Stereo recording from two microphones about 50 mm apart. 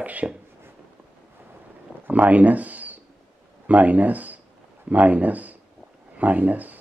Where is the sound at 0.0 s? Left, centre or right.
Right.